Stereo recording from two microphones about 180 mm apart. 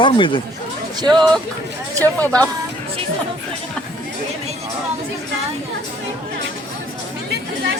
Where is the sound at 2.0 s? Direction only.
10° left (ahead or behind).